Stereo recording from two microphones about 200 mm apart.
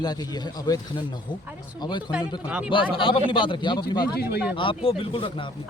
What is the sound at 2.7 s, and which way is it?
Speech, 25° left (ahead or behind).